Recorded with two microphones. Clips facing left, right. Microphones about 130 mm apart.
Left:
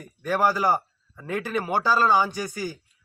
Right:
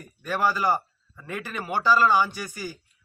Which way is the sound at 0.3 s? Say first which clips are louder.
Left 2 dB; 15° left (ahead or behind).